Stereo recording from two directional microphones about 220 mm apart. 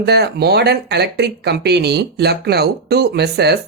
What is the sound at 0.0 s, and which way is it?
Speech, 50° right (ahead or behind).